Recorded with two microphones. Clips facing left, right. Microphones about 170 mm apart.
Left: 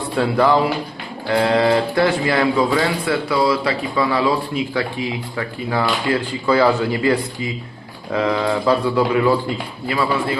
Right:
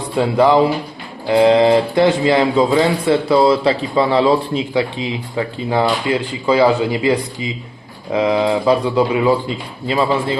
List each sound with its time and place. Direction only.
0.2 s speech: 20° right (ahead or behind)